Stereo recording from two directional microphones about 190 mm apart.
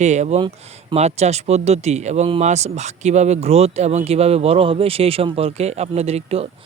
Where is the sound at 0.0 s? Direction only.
35° right (ahead or behind).